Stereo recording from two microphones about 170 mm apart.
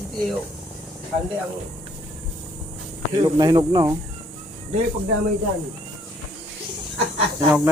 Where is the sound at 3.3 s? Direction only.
25° right (ahead or behind).